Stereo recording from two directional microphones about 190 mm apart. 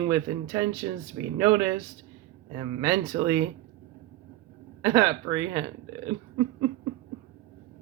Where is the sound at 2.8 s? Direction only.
15° right (ahead or behind).